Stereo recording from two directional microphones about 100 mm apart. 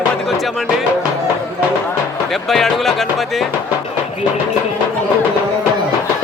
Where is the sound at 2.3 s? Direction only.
Centre (ahead or behind).